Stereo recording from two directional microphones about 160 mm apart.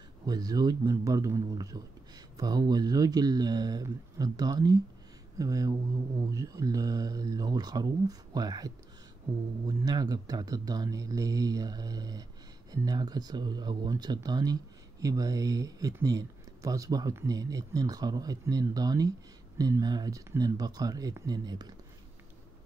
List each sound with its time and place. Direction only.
0.3 s speech: 25° right (ahead or behind)